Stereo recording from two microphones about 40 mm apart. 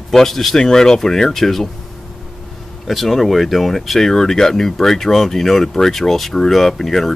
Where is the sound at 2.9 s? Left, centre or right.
Centre.